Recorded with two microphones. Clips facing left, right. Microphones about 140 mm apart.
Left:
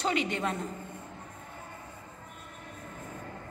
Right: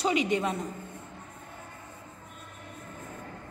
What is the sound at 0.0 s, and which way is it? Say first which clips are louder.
Speech: right 3 dB; 15° right (ahead or behind).